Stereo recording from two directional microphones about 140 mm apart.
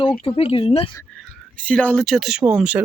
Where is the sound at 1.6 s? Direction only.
10° left (ahead or behind); by 2.8 s 5° right (ahead or behind).